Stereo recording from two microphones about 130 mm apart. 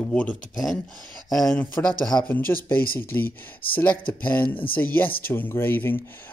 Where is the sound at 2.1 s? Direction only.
30° left (ahead or behind).